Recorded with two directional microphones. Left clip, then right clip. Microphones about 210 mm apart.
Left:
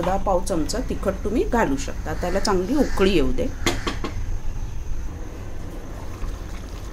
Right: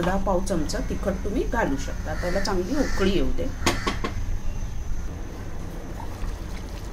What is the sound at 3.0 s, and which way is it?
Speech, 35° left (ahead or behind).